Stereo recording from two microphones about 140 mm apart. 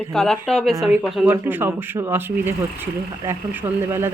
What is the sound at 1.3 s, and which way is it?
Speech, 15° right (ahead or behind).